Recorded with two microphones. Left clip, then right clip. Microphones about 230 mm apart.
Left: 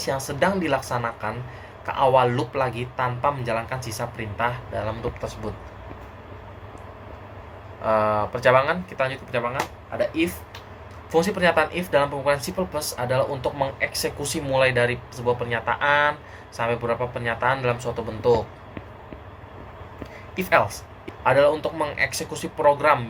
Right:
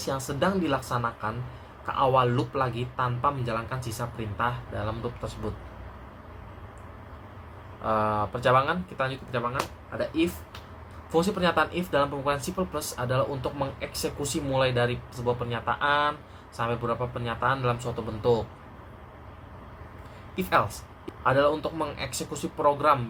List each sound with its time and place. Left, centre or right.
0.3 s speech: centre
7.9 s speech: centre
11.1 s speech: centre
20.3 s speech: centre